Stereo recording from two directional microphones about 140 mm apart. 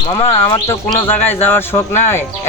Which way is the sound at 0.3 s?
40° left (ahead or behind).